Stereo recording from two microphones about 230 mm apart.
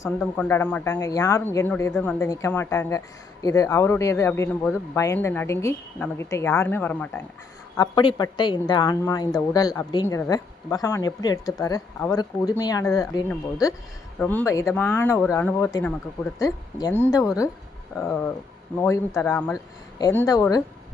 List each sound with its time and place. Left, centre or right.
0.0 s a man's voice: centre
7.8 s a man's voice: centre